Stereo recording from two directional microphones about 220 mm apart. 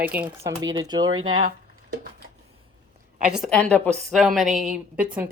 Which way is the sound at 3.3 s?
Centre (ahead or behind).